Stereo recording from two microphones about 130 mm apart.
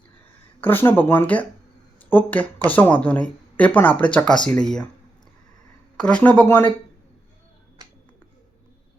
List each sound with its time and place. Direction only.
0.6 s speech: 15° left (ahead or behind)
6.0 s speech: 10° left (ahead or behind)